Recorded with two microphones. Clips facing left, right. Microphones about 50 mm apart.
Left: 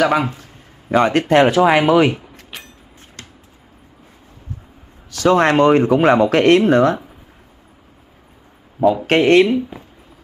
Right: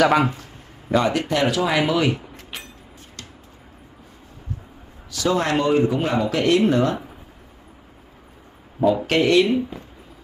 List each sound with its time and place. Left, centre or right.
0.0 s a man's voice: centre
1.0 s speech: left
2.5 s a sound: centre
5.1 s speech: left
6.1 s speech: left
9.0 s speech: left